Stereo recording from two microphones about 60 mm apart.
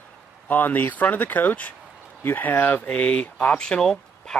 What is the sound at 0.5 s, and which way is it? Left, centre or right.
Speech, left.